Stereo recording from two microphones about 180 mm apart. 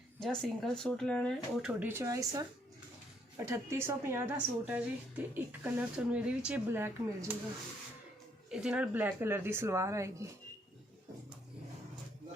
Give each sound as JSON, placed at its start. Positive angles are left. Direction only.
{"t": 0.2, "sound": "speech", "side_deg": 5}
{"t": 1.8, "sound": "speech", "side_deg": -15}
{"t": 8.4, "sound": "speech", "side_deg": -5}